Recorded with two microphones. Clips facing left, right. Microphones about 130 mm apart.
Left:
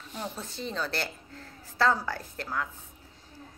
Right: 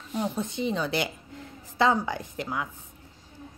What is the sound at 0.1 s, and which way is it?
A woman's voice, 15° right (ahead or behind).